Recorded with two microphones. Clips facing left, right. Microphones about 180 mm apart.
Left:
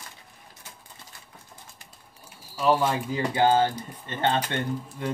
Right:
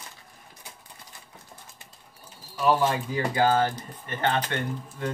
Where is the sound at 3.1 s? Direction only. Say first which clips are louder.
Left 3 dB; 25° left (ahead or behind).